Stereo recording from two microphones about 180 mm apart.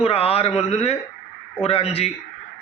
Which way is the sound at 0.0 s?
35° left (ahead or behind).